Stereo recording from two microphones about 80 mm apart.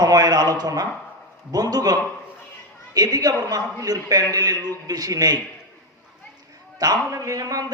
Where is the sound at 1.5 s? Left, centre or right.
Right.